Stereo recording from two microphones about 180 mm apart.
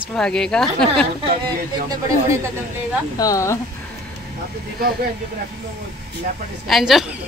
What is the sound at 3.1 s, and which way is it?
Speech, 20° left (ahead or behind).